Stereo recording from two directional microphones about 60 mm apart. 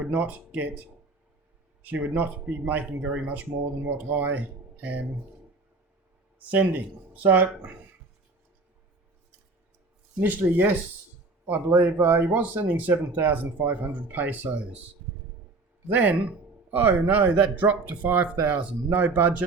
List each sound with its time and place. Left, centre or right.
0.0 s speech: right
1.8 s speech: right
6.4 s speech: right
10.2 s speech: right
15.9 s speech: right